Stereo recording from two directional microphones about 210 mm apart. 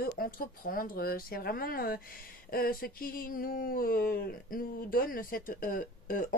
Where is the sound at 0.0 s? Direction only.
45° left (ahead or behind).